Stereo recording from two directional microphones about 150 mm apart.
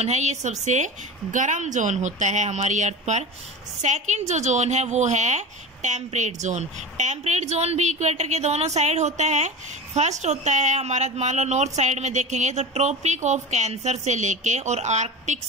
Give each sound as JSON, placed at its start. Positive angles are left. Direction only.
{"t": 0.0, "sound": "a woman's voice", "side_deg": -50}